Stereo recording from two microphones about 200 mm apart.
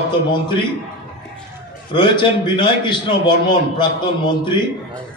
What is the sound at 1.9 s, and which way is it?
A man's voice, 25° left (ahead or behind).